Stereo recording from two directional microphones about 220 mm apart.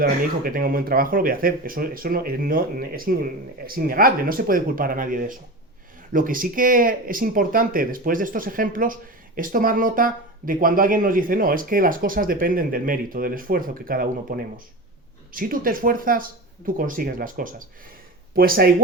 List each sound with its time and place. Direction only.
0.0 s speech: 40° right (ahead or behind)